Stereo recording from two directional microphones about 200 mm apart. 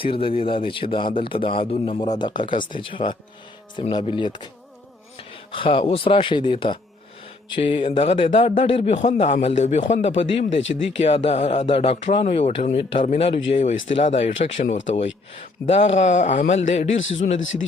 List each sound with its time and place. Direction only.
0.0 s speech: 25° left (ahead or behind)